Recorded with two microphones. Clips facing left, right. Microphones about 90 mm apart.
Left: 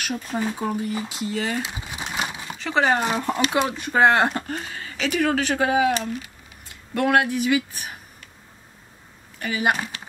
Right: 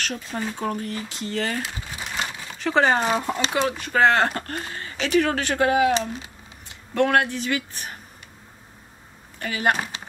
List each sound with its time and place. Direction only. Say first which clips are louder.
0.0 s speech: left 3 dB; 10° left (ahead or behind)
1.6 s crumpling: left 1 dB; 20° left (ahead or behind)
2.6 s speech: right 1 dB; centre (ahead or behind)
3.5 s speech: right 1 dB; 20° left (ahead or behind)
4.6 s speech: right 1 dB; centre (ahead or behind)
5.9 s a sound: right 1 dB; 20° right (ahead or behind)
6.9 s speech: even; 10° left (ahead or behind)
9.4 s speech: even; 5° left (ahead or behind)